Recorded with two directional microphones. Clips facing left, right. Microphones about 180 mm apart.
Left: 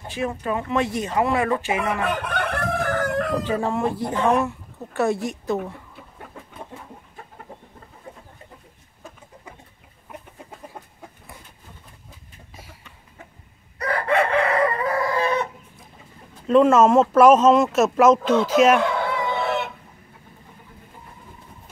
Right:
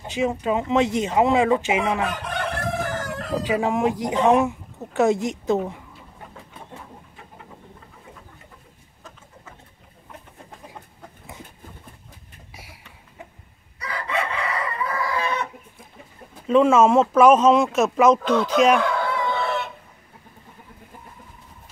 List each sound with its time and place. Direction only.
0.0 s speech: 20° right (ahead or behind)
2.0 s chicken: 60° left (ahead or behind)
3.4 s speech: 10° right (ahead or behind)
13.7 s chicken: 55° left (ahead or behind)
16.4 s speech: centre (ahead or behind)